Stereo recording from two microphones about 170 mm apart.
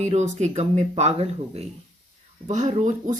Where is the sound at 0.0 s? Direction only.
40° right (ahead or behind).